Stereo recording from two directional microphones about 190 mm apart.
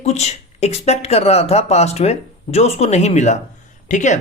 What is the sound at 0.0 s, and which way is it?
Speech, 35° left (ahead or behind).